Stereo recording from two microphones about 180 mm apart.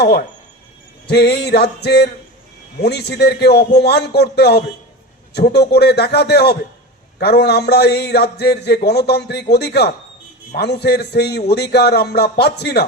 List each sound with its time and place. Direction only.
0.0 s a man's voice: 60° left (ahead or behind)